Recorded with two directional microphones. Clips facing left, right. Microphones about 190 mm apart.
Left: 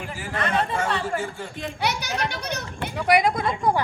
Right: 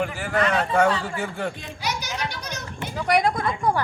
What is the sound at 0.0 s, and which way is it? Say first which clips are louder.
A man's voice: right 6 dB; 65° right (ahead or behind).